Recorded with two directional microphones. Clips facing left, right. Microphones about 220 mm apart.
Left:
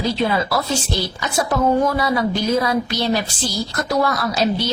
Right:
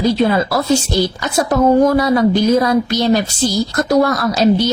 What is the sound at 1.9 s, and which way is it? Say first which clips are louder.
Speech: right 7 dB; 45° right (ahead or behind).